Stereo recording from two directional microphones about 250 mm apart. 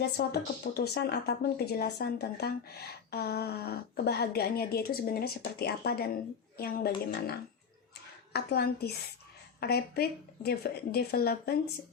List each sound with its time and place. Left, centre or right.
0.2 s speech: left